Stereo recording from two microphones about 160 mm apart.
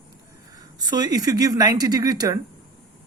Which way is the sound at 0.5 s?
25° right (ahead or behind).